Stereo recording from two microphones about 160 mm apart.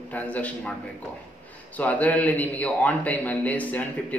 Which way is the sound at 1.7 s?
10° left (ahead or behind).